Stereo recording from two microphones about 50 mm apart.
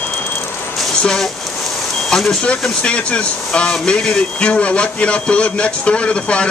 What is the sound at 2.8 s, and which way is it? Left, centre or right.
Speech, left.